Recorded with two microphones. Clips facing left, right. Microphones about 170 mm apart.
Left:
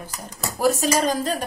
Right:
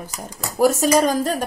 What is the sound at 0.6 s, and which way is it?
Speech, 50° right (ahead or behind).